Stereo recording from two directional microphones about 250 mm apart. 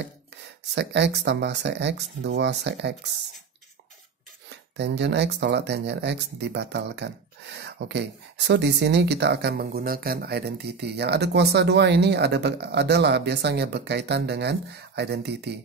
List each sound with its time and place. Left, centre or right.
0.7 s speech: right
4.7 s speech: right